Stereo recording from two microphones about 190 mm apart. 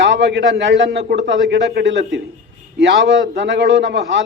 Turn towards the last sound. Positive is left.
turn(degrees=-70)  # may be behind; listen again after turning